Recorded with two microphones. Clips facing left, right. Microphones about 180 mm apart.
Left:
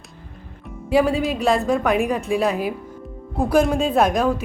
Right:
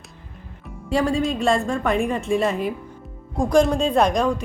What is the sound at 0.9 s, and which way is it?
A woman's voice, 5° left (ahead or behind).